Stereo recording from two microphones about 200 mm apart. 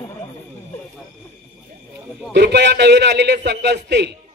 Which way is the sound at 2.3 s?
60° right (ahead or behind).